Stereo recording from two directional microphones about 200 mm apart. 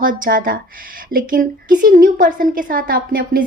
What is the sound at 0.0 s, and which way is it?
A woman's voice, 45° right (ahead or behind).